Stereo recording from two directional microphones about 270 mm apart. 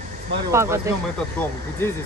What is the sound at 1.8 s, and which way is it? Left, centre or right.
Speech, centre.